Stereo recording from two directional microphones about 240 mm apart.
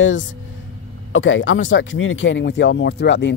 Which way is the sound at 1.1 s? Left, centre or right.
Left.